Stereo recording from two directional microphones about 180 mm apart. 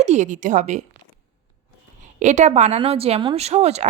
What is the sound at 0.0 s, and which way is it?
Speech, 40° right (ahead or behind).